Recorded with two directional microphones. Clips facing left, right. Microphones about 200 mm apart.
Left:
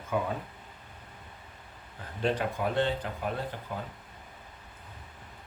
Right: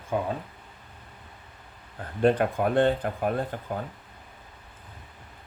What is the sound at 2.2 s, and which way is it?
Speech, 55° right (ahead or behind).